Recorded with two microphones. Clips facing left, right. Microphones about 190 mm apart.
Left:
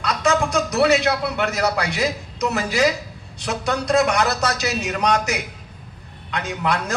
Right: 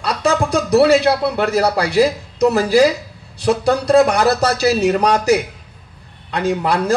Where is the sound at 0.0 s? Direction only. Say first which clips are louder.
Right 3 dB; 35° right (ahead or behind).